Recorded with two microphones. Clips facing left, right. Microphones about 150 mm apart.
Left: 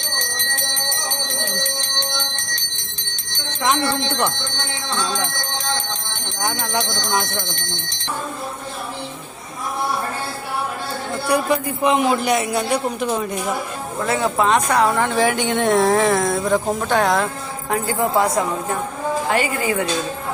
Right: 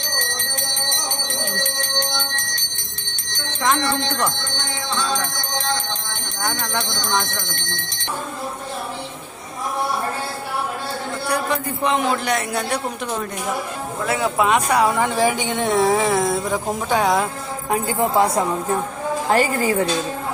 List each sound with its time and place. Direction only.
11.3 s a man's voice: 10° left (ahead or behind)
14.1 s a woman's voice: 10° right (ahead or behind)
17.7 s speech: 20° right (ahead or behind)
19.3 s a woman's voice: 40° right (ahead or behind)